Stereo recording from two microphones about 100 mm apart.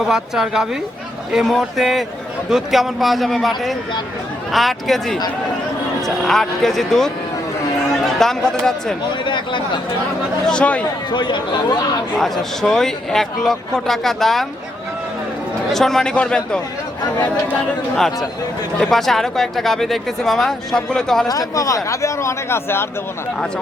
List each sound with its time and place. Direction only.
0.0 s speech: 5° right (ahead or behind)
6.2 s speech: 5° left (ahead or behind)
9.2 s speech: 50° left (ahead or behind)
10.4 s a man's voice: 10° left (ahead or behind)
11.1 s speech: 50° left (ahead or behind)
12.1 s speech: 5° left (ahead or behind)
15.7 s a man's voice: 5° left (ahead or behind)
17.9 s speech: 5° left (ahead or behind)
21.2 s speech: 35° left (ahead or behind)